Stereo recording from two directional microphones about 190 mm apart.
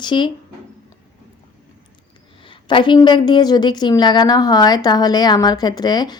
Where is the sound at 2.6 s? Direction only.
25° left (ahead or behind).